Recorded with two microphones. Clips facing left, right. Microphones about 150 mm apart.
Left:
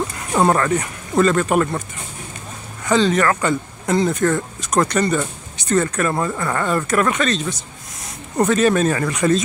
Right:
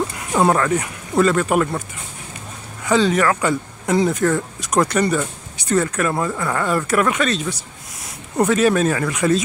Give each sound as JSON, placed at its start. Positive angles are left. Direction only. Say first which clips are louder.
{"t": 0.3, "sound": "speech", "louder": "even", "side_deg": -5}
{"t": 2.8, "sound": "speech", "louder": "even", "side_deg": -10}